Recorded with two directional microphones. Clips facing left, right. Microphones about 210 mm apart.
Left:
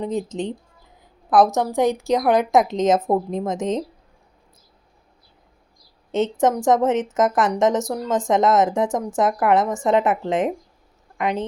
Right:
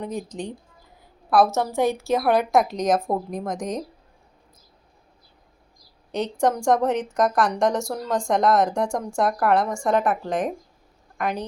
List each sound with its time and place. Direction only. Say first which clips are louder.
0.0 s a woman's voice: left 5 dB; 20° left (ahead or behind)
6.1 s a woman's voice: left 3 dB; 20° left (ahead or behind)